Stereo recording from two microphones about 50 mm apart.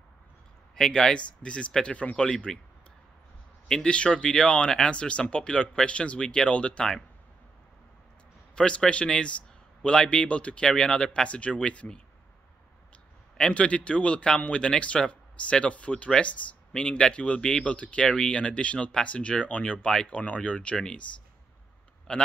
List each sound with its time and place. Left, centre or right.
0.7 s speech: centre
3.6 s speech: centre
8.5 s speech: left
13.4 s speech: left